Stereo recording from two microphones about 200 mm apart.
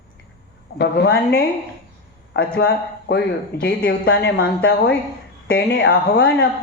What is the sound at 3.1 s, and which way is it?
Speech, 55° left (ahead or behind).